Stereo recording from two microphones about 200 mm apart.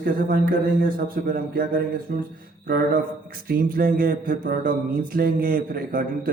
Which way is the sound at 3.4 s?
45° right (ahead or behind).